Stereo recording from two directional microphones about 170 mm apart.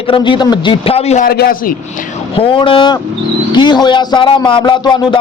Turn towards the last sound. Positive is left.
turn(degrees=25)  # may be behind; listen again after turning